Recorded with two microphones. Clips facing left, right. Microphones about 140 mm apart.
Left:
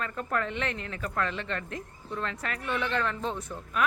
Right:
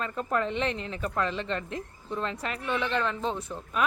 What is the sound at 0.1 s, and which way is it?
A child's voice, 20° right (ahead or behind).